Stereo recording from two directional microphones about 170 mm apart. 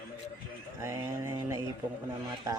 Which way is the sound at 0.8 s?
15° right (ahead or behind).